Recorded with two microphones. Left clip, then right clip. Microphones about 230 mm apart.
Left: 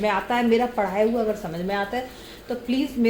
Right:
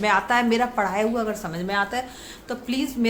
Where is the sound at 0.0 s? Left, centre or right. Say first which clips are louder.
Right 2 dB; right.